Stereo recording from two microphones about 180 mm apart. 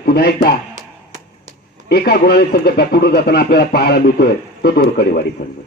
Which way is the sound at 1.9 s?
60° left (ahead or behind).